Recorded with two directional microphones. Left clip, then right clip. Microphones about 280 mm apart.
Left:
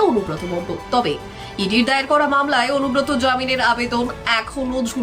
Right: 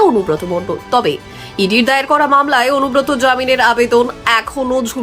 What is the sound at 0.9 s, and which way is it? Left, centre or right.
Speech, centre.